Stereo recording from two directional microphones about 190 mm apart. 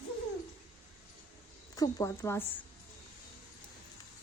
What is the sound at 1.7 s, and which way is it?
Speech, 20° left (ahead or behind).